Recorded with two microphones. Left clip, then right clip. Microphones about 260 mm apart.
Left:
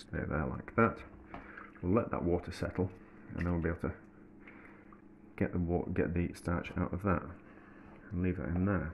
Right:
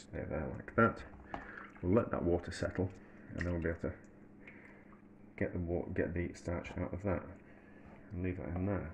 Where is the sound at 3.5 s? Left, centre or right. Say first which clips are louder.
Left 2 dB; left.